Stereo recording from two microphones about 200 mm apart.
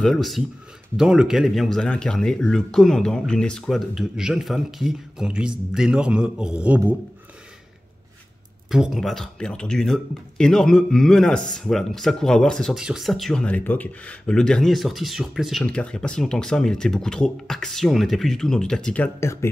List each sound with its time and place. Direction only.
0.0 s speech: centre (ahead or behind)
8.6 s speech: centre (ahead or behind)